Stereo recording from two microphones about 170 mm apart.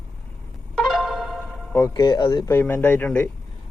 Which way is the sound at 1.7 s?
20° left (ahead or behind).